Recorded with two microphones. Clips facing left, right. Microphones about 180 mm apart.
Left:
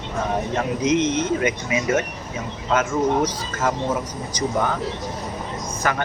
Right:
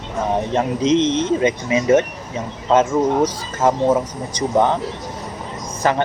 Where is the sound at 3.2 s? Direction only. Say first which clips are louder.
Right 5 dB; 25° right (ahead or behind).